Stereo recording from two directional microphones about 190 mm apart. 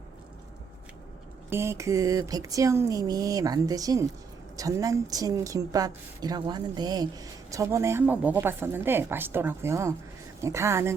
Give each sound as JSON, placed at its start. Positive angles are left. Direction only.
{"t": 1.5, "sound": "a woman's voice", "side_deg": -15}